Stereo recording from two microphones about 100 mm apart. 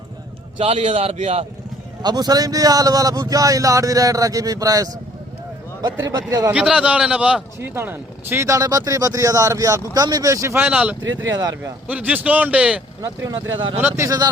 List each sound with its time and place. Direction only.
0.6 s a man's voice: 90° right
2.0 s speech: 45° right (ahead or behind)
6.0 s speech: 35° right (ahead or behind)
6.5 s a man's voice: 10° right (ahead or behind)
7.6 s speech: 25° right (ahead or behind)
10.6 s a man's voice: 15° right (ahead or behind)
13.3 s speech: 55° right (ahead or behind)
13.7 s speech: 25° right (ahead or behind)